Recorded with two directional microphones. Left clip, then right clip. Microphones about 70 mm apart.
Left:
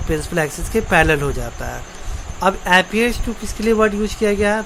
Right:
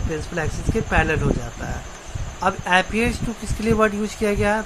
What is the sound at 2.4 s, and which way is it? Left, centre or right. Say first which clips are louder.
Speech: left 4 dB; left.